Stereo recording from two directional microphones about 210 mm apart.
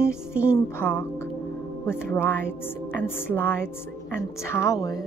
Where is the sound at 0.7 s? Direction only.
10° left (ahead or behind).